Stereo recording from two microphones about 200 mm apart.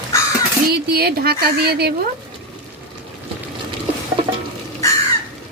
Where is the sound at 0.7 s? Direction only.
50° right (ahead or behind).